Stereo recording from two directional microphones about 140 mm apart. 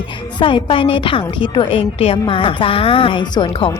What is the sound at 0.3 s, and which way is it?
Speech, 35° left (ahead or behind).